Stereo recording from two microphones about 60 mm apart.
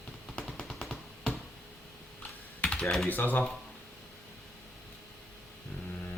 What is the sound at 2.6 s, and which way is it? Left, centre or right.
Computer keyboard, centre.